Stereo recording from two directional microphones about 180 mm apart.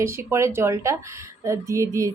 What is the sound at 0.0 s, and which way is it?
Speech, 15° right (ahead or behind).